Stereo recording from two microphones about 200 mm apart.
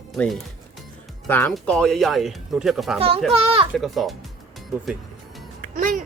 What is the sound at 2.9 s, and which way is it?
Speech, 30° right (ahead or behind).